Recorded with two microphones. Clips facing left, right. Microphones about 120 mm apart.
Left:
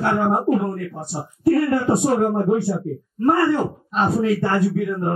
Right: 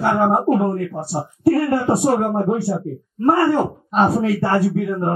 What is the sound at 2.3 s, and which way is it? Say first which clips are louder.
Speech: even; 60° right (ahead or behind).